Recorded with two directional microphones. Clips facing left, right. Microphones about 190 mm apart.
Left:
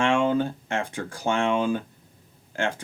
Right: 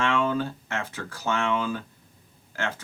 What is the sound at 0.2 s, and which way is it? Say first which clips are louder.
Speech: left 3 dB; 20° left (ahead or behind).